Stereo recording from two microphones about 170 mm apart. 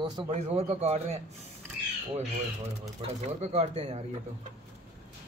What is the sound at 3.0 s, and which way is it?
Speech, 40° right (ahead or behind).